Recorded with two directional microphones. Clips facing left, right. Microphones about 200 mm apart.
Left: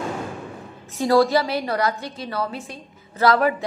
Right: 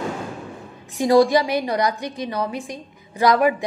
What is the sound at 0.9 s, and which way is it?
A woman's voice, 15° right (ahead or behind).